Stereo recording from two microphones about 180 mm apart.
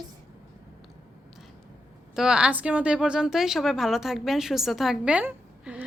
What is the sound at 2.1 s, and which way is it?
A woman's voice, 5° right (ahead or behind).